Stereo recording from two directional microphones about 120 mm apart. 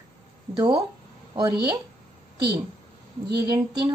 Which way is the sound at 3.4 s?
35° right (ahead or behind).